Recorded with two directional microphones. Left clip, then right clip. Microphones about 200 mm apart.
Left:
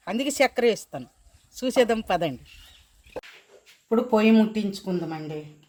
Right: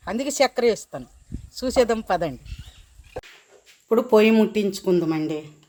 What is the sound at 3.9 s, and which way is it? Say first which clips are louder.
Speech: right 4 dB; 40° right (ahead or behind).